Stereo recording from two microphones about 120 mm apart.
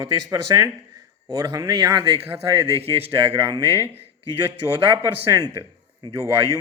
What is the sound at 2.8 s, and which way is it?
Speech, 55° right (ahead or behind).